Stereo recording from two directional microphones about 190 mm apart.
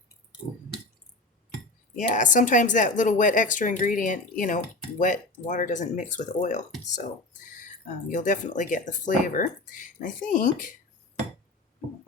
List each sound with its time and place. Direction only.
2.0 s speech: 40° left (ahead or behind)